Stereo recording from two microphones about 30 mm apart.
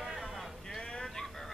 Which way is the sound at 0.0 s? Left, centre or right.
Centre.